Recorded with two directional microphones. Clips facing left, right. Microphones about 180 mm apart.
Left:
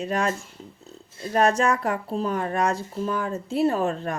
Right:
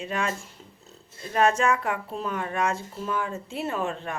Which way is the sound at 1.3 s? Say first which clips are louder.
Left 2 dB; 40° left (ahead or behind).